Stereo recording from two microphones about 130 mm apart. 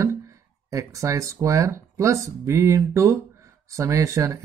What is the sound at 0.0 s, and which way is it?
Speech, 25° right (ahead or behind).